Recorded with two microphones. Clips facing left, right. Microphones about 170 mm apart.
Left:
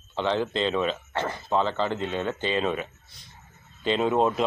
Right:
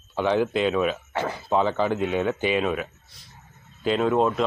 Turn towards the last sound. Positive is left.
turn(degrees=0)  # may be behind; listen again after turning